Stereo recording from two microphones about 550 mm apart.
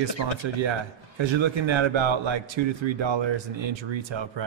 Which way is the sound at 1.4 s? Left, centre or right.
Right.